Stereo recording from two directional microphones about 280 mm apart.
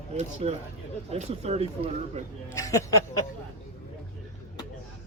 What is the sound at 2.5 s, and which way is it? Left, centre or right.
Speech, centre.